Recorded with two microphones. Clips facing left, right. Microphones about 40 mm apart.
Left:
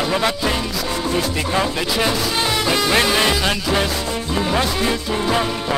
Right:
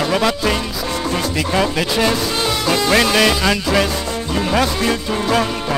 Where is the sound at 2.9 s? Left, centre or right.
Right.